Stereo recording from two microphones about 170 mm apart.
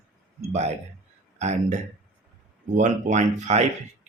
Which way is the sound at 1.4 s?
45° right (ahead or behind).